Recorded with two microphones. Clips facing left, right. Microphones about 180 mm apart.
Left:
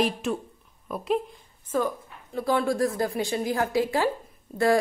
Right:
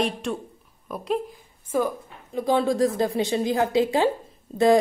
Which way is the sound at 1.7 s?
15° right (ahead or behind).